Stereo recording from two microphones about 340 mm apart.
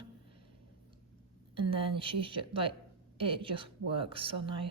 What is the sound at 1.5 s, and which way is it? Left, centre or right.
Speech, centre.